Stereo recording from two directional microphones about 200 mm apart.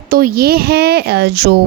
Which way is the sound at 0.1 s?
45° right (ahead or behind).